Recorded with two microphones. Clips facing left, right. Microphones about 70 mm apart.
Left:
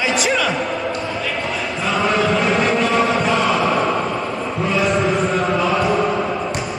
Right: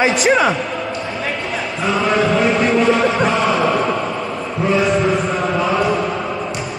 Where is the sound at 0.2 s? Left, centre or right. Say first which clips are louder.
Right 5 dB; right.